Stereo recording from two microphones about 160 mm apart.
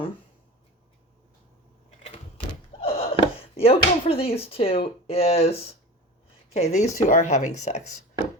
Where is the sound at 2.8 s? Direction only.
40° left (ahead or behind).